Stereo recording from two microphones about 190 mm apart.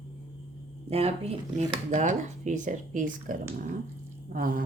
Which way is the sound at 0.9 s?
30° right (ahead or behind).